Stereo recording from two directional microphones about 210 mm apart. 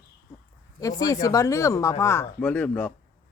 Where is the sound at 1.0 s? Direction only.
15° left (ahead or behind).